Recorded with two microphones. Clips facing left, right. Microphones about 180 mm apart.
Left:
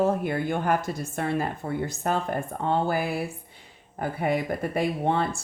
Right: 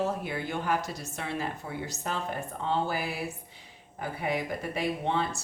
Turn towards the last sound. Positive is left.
turn(degrees=50)  # may be behind; listen again after turning